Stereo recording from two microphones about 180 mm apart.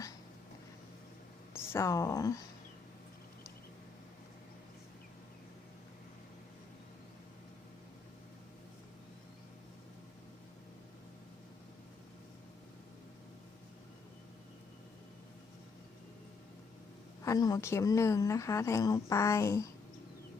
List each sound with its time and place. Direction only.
1.5 s speech: 15° left (ahead or behind)
17.2 s speech: 20° left (ahead or behind)